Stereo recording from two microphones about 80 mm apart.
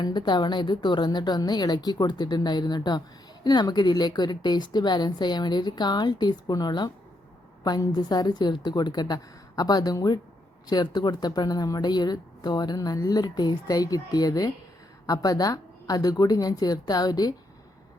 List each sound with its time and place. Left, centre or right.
0.0 s a woman's voice: left